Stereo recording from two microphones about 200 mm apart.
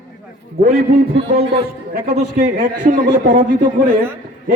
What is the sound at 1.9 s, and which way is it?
A man's voice, 45° right (ahead or behind).